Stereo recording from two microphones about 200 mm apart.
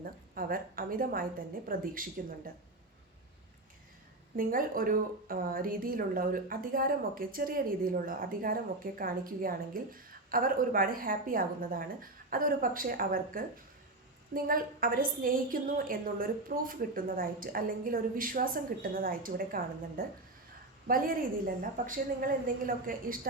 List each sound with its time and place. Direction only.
0.0 s speech: 45° right (ahead or behind)
4.4 s speech: 45° right (ahead or behind)